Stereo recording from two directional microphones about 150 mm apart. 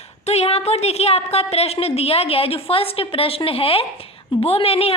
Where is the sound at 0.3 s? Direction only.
45° left (ahead or behind).